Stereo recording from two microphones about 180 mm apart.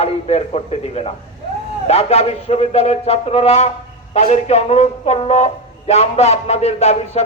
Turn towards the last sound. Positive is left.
turn(degrees=35)  # may be behind; listen again after turning